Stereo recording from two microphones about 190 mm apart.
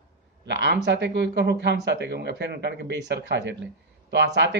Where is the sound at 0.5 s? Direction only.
65° right (ahead or behind).